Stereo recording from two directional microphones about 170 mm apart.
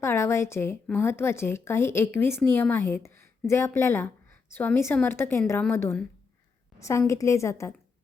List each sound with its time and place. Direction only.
0.0 s a woman's voice: 15° left (ahead or behind)